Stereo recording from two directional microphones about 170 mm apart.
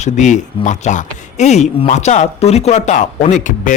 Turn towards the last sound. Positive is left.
turn(degrees=50)  # may be behind; listen again after turning